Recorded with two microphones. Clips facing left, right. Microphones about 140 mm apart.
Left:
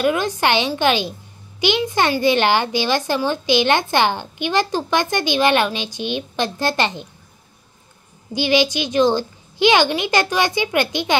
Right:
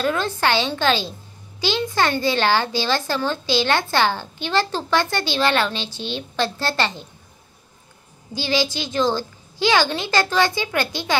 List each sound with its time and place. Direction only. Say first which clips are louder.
0.0 s speech: left 3 dB; 15° left (ahead or behind)
8.3 s a woman's voice: left 5 dB; 20° left (ahead or behind)